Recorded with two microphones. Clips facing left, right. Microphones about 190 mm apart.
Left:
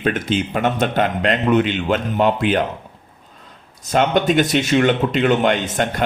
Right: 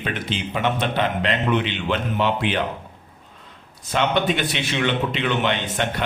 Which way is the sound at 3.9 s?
45° left (ahead or behind).